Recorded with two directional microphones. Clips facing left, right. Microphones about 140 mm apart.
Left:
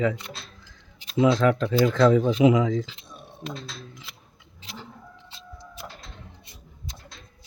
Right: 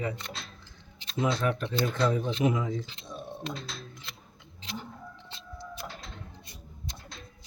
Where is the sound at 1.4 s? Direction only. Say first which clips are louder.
Left 8 dB; 90° left.